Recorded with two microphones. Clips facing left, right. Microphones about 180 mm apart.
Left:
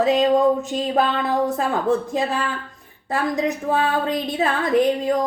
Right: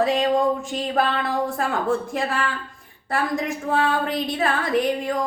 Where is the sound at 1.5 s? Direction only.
20° left (ahead or behind).